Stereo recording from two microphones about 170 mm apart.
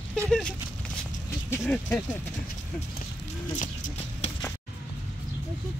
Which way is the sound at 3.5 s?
45° left (ahead or behind).